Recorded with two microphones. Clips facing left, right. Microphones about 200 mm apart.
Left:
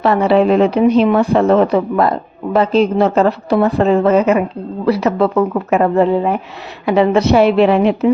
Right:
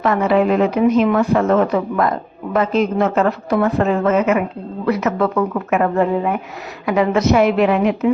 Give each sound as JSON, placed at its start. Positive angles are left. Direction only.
{"t": 0.0, "sound": "speech", "side_deg": 30}